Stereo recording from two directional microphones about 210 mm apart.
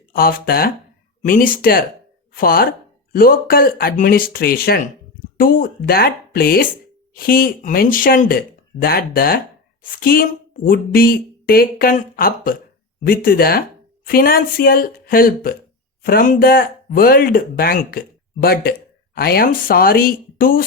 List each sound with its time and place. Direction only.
0.1 s a woman's voice: 45° left (ahead or behind)